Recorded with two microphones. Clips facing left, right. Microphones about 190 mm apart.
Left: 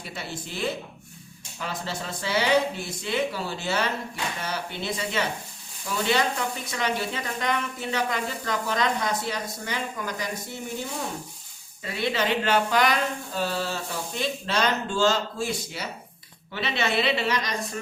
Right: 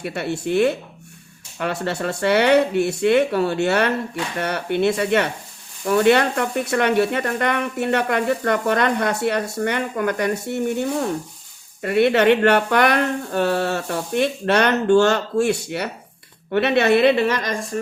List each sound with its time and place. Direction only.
0.0 s a woman's voice: 65° right (ahead or behind)